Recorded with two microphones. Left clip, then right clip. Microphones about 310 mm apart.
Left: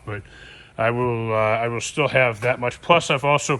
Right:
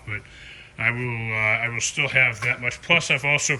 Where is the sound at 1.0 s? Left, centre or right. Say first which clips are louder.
Left 6 dB; left.